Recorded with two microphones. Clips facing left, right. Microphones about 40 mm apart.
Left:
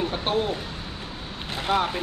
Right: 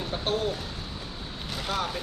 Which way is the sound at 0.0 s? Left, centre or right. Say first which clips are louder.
Left 4 dB; left.